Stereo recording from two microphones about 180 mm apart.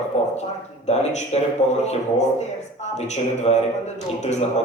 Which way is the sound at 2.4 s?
40° left (ahead or behind).